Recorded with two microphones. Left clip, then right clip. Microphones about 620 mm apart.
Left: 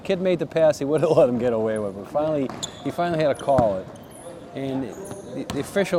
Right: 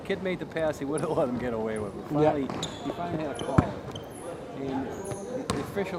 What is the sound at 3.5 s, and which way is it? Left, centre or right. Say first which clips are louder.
Speech: left 8 dB; left.